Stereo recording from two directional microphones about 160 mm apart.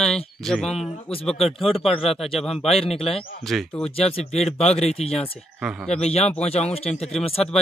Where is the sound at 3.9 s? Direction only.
40° left (ahead or behind).